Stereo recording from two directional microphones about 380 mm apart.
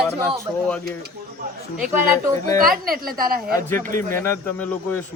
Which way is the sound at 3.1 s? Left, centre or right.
Right.